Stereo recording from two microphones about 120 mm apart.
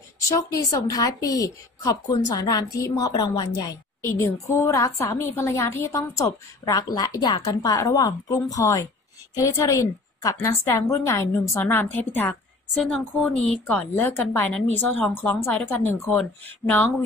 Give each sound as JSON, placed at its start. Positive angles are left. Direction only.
{"t": 0.6, "sound": "a woman's voice", "side_deg": 30}
{"t": 12.8, "sound": "speech", "side_deg": 0}
{"t": 14.0, "sound": "a woman's voice", "side_deg": 20}
{"t": 14.9, "sound": "speech", "side_deg": 10}